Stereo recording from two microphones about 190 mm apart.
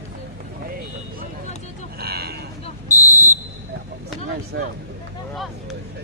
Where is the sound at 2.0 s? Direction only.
55° right (ahead or behind).